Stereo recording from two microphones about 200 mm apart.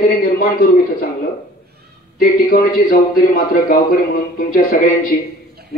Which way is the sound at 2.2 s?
45° left (ahead or behind).